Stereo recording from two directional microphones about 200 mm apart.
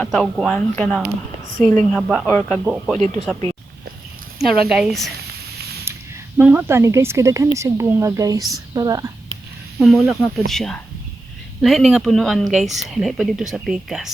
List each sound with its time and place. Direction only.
0.0 s speech: centre (ahead or behind)
2.2 s speech: 10° left (ahead or behind)
2.6 s speech: 5° right (ahead or behind)
4.7 s speech: centre (ahead or behind)
5.9 s a sound: 10° right (ahead or behind)
6.3 s a woman's voice: 10° right (ahead or behind)
9.7 s speech: centre (ahead or behind)